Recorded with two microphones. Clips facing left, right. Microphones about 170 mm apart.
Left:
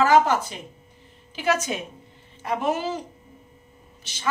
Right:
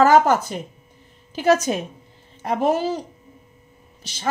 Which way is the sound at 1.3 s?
40° right (ahead or behind).